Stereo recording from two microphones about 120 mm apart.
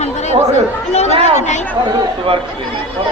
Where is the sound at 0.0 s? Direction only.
70° left (ahead or behind).